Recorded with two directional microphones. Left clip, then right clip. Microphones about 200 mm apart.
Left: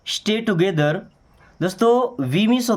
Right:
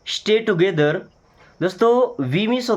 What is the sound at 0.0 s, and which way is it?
Speech, 35° left (ahead or behind).